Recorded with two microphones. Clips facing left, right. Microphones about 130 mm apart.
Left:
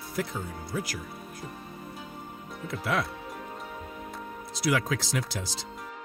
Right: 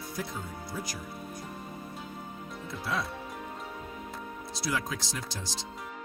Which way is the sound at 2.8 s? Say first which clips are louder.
Left 4 dB; 90° left.